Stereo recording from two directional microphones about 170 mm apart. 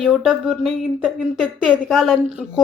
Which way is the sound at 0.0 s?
Centre (ahead or behind).